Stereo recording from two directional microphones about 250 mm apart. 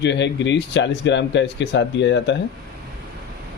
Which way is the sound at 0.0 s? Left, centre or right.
Left.